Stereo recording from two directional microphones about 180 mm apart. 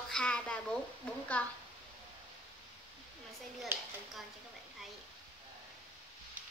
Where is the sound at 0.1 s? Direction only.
5° left (ahead or behind).